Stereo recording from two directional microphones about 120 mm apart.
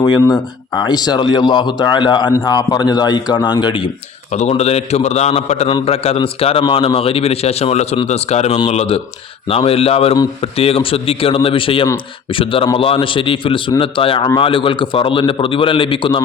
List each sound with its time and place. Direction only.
0.0 s a man's voice: 30° left (ahead or behind)
4.3 s a man's voice: 70° left (ahead or behind); by 16.2 s 45° left (ahead or behind)